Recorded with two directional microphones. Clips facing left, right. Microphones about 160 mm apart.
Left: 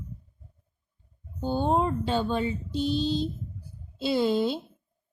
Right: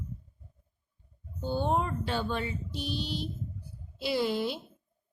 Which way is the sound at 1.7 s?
25° left (ahead or behind).